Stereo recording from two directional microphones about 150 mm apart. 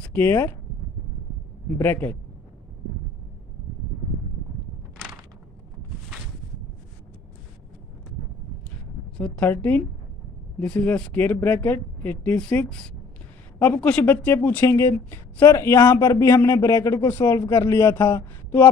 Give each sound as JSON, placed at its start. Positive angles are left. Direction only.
{"t": 0.0, "sound": "speech", "side_deg": 10}
{"t": 1.8, "sound": "speech", "side_deg": 15}
{"t": 9.1, "sound": "speech", "side_deg": 5}